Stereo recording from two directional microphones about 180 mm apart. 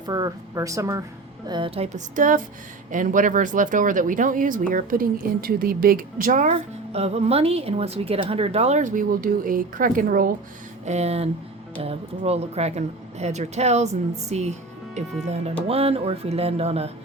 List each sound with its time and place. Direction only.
0.0 s speech: 20° right (ahead or behind); by 10.3 s 50° right (ahead or behind)
10.8 s speech: 35° right (ahead or behind)